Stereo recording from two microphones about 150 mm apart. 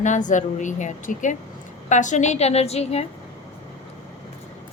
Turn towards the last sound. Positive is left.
turn(degrees=45)  # may be behind; listen again after turning